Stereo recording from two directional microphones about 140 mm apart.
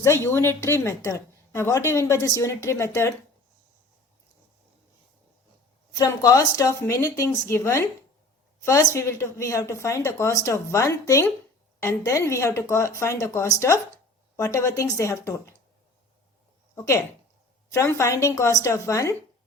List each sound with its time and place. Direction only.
0.0 s speech: 20° left (ahead or behind)
5.9 s speech: 25° left (ahead or behind)
16.7 s speech: 20° left (ahead or behind)